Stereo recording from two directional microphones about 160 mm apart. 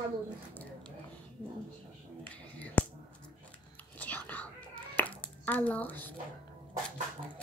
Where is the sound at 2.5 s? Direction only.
10° left (ahead or behind).